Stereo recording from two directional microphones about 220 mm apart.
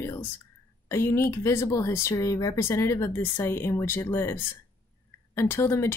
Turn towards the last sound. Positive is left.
turn(degrees=10)  # may be behind; listen again after turning